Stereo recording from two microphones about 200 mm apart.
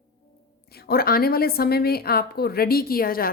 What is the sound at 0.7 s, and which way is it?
A woman's voice, 50° left (ahead or behind).